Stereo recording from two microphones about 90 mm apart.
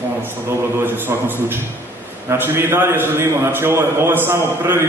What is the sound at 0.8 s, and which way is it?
A man's voice, 20° right (ahead or behind).